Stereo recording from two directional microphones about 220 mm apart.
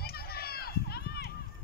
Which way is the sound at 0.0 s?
45° left (ahead or behind).